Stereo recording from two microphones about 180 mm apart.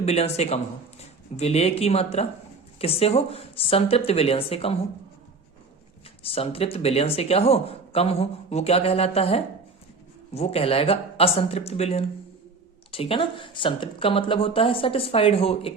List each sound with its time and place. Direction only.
0.0 s speech: 35° left (ahead or behind)
6.2 s speech: 30° left (ahead or behind)